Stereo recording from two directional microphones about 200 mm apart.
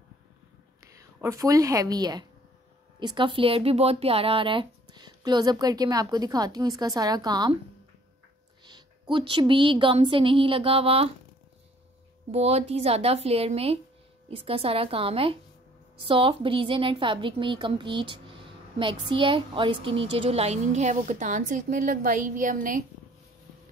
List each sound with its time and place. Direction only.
1.2 s a woman's voice: 15° right (ahead or behind)
8.6 s speech: 20° right (ahead or behind)
12.3 s a woman's voice: 30° right (ahead or behind)